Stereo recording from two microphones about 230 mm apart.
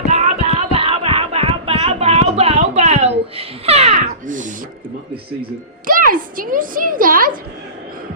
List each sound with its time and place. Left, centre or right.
0.1 s music: right
5.8 s a woman's voice: right